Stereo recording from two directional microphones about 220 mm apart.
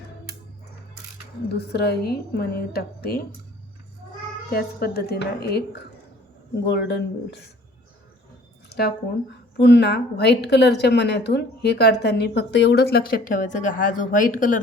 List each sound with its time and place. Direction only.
1.5 s a woman's voice: 45° left (ahead or behind)
4.5 s a woman's voice: 45° left (ahead or behind)
8.7 s a sound: 50° left (ahead or behind)
9.6 s a woman's voice: 50° left (ahead or behind)